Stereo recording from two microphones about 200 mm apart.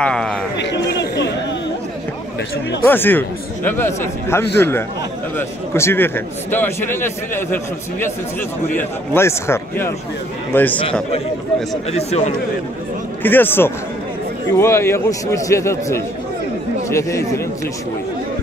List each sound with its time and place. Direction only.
0.0 s a man's voice: 5° left (ahead or behind)
0.9 s chatter: 60° left (ahead or behind)
2.8 s a man's voice: 10° left (ahead or behind)
11.9 s speech: 30° left (ahead or behind)
13.2 s a man's voice: 10° left (ahead or behind)